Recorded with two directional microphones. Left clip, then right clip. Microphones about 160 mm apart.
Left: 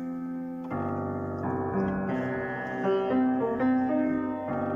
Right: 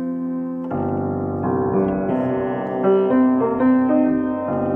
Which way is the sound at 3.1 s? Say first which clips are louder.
Right 9 dB; 20° right (ahead or behind).